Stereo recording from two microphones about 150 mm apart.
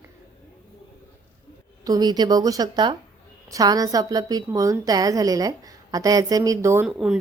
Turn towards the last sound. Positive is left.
turn(degrees=-5)  # may be behind; listen again after turning